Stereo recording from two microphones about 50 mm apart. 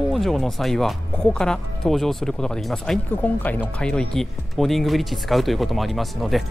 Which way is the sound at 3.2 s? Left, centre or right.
Left.